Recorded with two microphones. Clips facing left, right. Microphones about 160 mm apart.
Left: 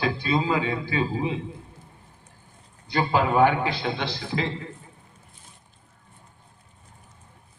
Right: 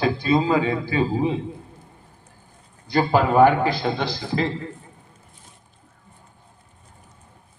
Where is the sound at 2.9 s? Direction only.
40° right (ahead or behind).